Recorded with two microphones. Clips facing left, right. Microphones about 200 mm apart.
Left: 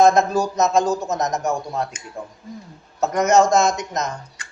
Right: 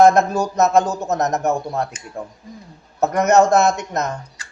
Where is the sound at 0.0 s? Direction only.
60° right (ahead or behind).